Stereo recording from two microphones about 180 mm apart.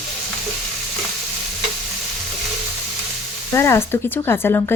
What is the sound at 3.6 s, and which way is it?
Speech, 15° left (ahead or behind).